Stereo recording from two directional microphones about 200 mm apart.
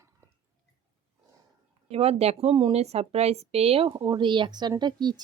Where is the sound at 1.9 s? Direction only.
30° right (ahead or behind).